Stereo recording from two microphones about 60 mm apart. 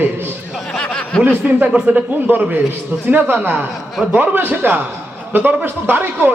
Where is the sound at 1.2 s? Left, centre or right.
Right.